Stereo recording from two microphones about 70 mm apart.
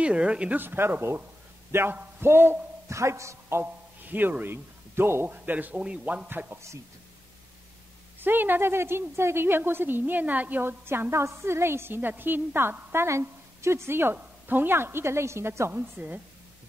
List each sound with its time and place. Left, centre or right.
0.0 s a woman's voice: centre
0.6 s a woman's voice: right
2.9 s a man's voice: right
4.0 s speech: right
5.3 s a man's voice: right
6.2 s a man's voice: right
8.2 s a woman's voice: right